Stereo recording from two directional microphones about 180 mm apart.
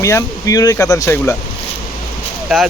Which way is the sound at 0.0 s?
15° left (ahead or behind).